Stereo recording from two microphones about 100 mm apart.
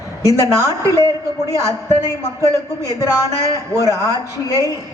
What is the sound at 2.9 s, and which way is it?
Speech, 35° left (ahead or behind).